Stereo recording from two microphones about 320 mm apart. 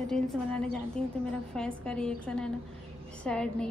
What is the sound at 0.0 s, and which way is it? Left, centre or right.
A woman's voice, centre.